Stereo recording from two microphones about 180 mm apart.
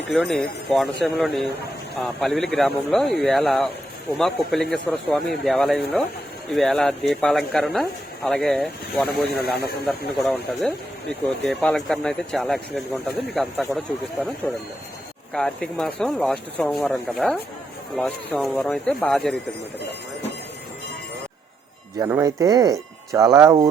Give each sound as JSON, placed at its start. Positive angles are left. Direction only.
{"t": 0.1, "sound": "speech", "side_deg": 0}
{"t": 21.9, "sound": "speech", "side_deg": -20}